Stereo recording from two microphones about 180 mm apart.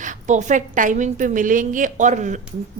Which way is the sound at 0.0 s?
40° right (ahead or behind).